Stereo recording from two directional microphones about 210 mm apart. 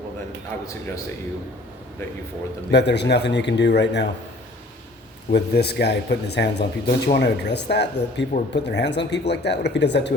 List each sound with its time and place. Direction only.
2.6 s speech: 55° left (ahead or behind)
5.3 s speech: 50° left (ahead or behind)